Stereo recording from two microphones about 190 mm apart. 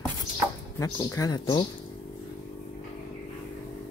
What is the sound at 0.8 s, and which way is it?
Speech, 15° left (ahead or behind).